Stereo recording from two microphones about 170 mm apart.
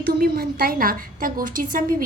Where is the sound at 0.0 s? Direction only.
65° right (ahead or behind).